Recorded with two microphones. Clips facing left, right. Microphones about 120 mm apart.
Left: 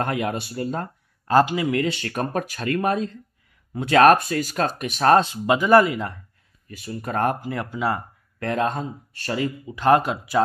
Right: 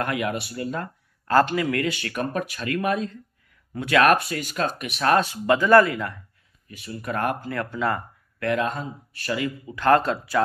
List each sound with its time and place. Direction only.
0.0 s speech: 35° left (ahead or behind)
1.4 s speech: 15° left (ahead or behind)
6.8 s speech: 35° left (ahead or behind)
7.3 s speech: 20° left (ahead or behind)
8.4 s speech: 35° left (ahead or behind)
9.8 s speech: 15° left (ahead or behind)